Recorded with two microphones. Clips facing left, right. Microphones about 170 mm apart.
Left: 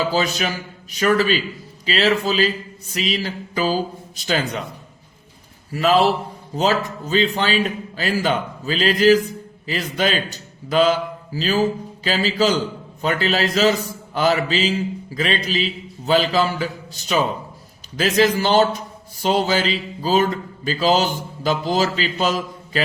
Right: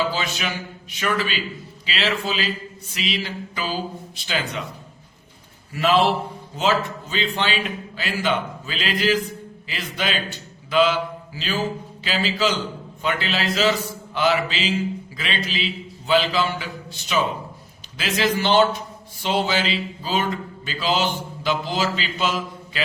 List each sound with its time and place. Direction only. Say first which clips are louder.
0.1 s a man's voice: left 6 dB; 40° left (ahead or behind)
5.7 s a man's voice: left 2 dB; 40° left (ahead or behind)